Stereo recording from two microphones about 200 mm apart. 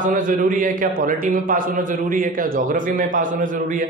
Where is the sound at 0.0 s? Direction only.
40° right (ahead or behind).